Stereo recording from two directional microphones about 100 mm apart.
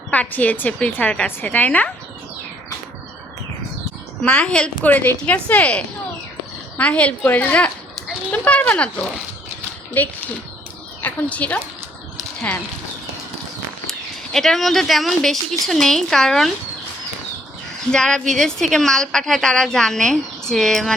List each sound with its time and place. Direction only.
0.1 s a woman's voice: 15° left (ahead or behind)
4.2 s a woman's voice: 10° left (ahead or behind)
14.3 s a woman's voice: 5° left (ahead or behind)
17.9 s a woman's voice: 5° left (ahead or behind)